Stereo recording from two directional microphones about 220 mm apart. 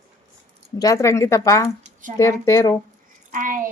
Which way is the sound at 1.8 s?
35° right (ahead or behind).